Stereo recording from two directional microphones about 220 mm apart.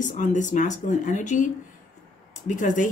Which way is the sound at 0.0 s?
35° left (ahead or behind).